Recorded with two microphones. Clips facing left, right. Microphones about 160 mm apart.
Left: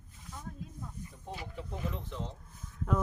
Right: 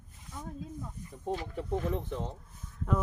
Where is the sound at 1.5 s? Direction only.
55° right (ahead or behind).